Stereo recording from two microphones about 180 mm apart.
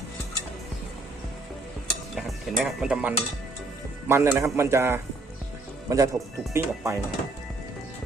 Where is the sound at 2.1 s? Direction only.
Centre (ahead or behind).